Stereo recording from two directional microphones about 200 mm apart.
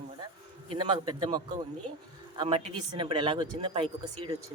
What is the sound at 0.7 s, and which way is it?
Speech, 25° right (ahead or behind).